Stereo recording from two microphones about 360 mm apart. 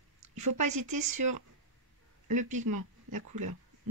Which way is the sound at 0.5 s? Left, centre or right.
Right.